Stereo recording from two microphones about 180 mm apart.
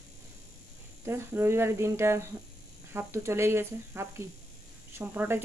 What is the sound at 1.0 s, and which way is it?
Speech, 15° right (ahead or behind).